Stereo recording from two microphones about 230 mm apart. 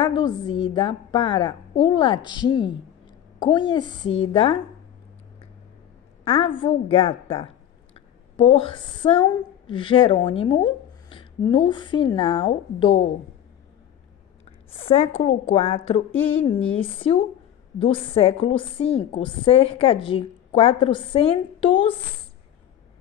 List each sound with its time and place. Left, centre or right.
0.0 s a woman's voice: centre
6.2 s a woman's voice: left
14.4 s a woman's voice: left